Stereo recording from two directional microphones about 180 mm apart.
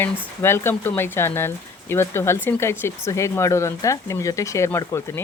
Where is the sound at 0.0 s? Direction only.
15° left (ahead or behind).